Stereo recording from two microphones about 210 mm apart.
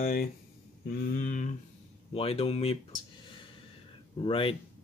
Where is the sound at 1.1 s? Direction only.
40° left (ahead or behind).